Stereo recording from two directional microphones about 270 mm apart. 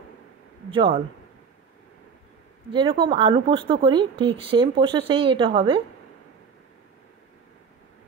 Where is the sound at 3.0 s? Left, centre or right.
Centre.